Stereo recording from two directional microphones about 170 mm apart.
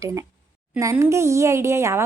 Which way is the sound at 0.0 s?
20° right (ahead or behind).